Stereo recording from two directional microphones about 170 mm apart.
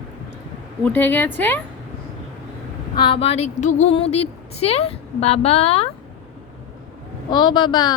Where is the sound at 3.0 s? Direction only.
35° left (ahead or behind).